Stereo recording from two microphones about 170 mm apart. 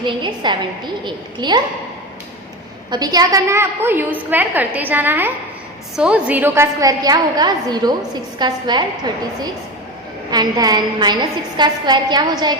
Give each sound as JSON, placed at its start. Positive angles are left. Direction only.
{"t": 0.0, "sound": "a woman's voice", "side_deg": -25}
{"t": 2.9, "sound": "a woman's voice", "side_deg": -25}